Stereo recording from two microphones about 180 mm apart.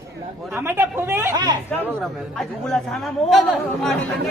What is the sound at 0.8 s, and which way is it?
Speech, 15° right (ahead or behind).